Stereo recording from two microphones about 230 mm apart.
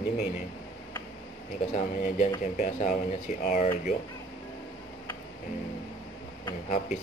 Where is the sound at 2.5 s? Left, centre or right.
Left.